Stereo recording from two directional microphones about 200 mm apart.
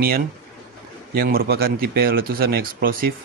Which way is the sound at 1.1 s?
50° right (ahead or behind).